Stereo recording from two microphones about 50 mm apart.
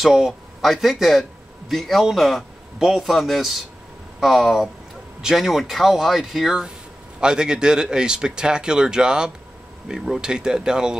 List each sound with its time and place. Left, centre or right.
0.0 s a man's voice: centre
7.2 s speech: centre